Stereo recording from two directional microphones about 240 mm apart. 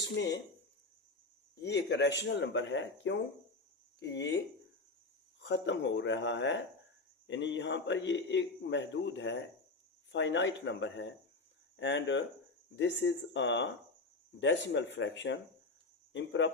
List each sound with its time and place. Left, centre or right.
0.0 s speech: left
1.6 s a man's voice: left
5.4 s a man's voice: left